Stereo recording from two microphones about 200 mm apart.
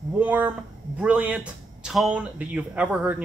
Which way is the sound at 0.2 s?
10° right (ahead or behind).